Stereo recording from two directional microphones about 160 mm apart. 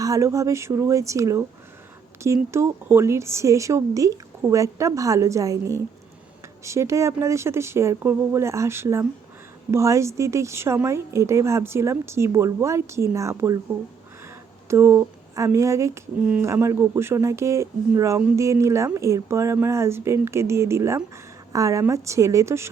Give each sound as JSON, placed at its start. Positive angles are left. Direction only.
{"t": 0.0, "sound": "a woman's voice", "side_deg": -20}
{"t": 14.7, "sound": "a woman's voice", "side_deg": -15}